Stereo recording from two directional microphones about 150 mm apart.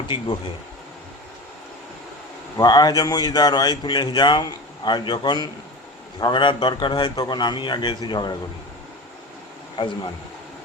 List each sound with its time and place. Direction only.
2.6 s a man's voice: 25° left (ahead or behind)
9.7 s speech: 35° left (ahead or behind)